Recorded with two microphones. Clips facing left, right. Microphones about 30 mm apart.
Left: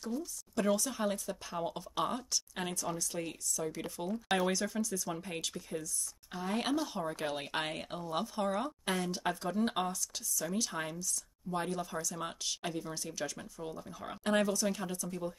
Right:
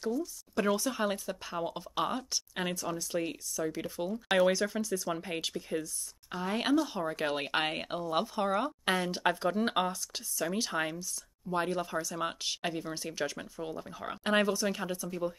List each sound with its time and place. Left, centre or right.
0.6 s speech: right
4.1 s speech: centre
4.5 s speech: right